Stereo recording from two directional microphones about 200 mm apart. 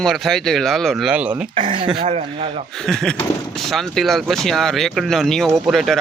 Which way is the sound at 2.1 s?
35° right (ahead or behind).